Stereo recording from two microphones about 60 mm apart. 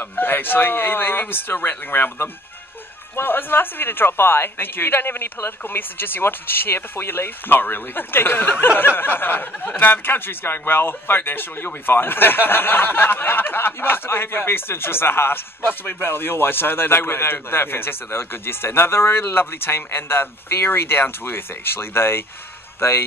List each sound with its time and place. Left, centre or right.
0.0 s speech: left